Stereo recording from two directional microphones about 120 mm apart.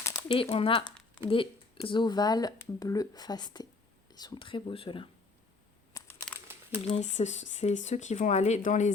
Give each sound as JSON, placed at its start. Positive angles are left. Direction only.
{"t": 0.3, "sound": "speech", "side_deg": 50}
{"t": 6.5, "sound": "a sound", "side_deg": -20}
{"t": 6.8, "sound": "speech", "side_deg": 70}